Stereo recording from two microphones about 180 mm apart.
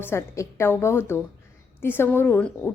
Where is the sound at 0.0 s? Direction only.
15° left (ahead or behind).